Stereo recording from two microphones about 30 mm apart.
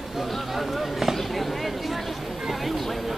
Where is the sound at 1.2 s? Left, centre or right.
Centre.